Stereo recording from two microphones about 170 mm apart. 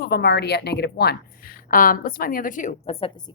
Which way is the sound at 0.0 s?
70° left (ahead or behind).